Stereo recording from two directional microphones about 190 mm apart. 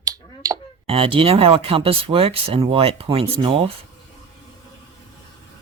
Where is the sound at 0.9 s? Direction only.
30° right (ahead or behind).